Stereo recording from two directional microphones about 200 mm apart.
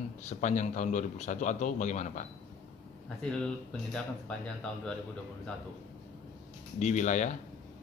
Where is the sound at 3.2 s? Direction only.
5° left (ahead or behind).